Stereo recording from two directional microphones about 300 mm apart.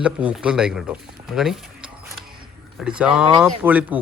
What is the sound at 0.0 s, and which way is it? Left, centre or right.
Speech, centre.